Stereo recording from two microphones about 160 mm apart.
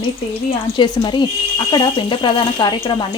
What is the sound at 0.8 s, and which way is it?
Speech, 30° left (ahead or behind).